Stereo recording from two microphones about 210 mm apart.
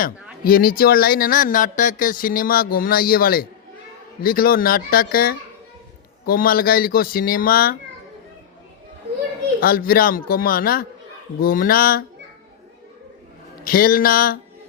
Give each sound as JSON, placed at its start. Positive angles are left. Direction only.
{"t": 0.4, "sound": "speech", "side_deg": 45}
{"t": 9.6, "sound": "speech", "side_deg": 45}
{"t": 13.7, "sound": "speech", "side_deg": 45}